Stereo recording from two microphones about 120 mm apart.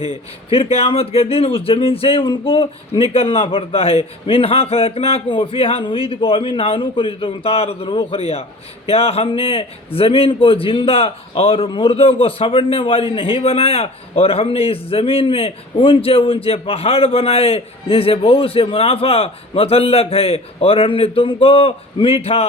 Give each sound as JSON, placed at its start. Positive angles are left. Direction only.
{"t": 0.5, "sound": "a man's voice", "side_deg": 55}